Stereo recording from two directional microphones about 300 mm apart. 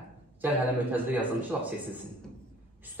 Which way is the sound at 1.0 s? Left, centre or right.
Centre.